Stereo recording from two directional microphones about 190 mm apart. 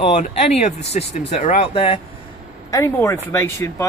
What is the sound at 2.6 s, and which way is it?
Speech, 15° left (ahead or behind).